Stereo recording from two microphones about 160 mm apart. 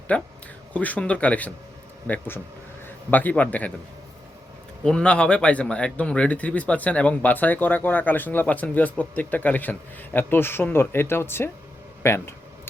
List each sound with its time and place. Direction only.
0.1 s a man's voice: 10° left (ahead or behind)
4.8 s a man's voice: 5° left (ahead or behind)